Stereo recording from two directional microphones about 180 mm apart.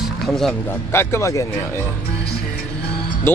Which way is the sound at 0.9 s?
15° left (ahead or behind).